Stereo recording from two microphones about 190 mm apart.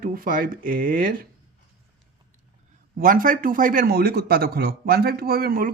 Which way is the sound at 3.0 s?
45° right (ahead or behind).